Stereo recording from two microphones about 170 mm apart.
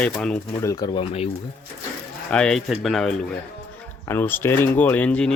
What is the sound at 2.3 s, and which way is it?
Speech, 5° left (ahead or behind).